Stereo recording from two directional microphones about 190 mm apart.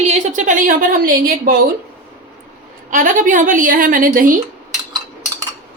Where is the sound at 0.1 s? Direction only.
40° right (ahead or behind).